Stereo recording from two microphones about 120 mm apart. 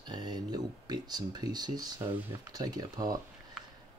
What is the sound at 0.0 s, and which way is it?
Speech, 35° right (ahead or behind).